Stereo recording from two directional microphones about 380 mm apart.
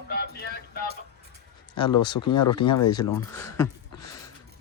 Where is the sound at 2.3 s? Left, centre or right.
Left.